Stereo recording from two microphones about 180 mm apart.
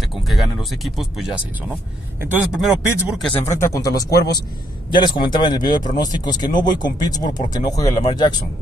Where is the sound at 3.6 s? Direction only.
20° left (ahead or behind).